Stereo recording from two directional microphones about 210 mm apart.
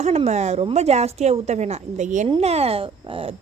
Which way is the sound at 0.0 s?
30° right (ahead or behind).